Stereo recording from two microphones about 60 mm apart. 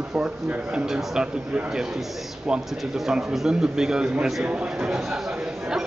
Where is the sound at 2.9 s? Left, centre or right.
Centre.